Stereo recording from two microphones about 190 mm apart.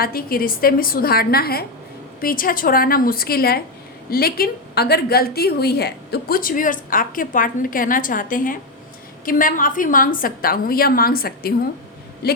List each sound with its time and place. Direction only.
0.0 s a woman's voice: 50° left (ahead or behind)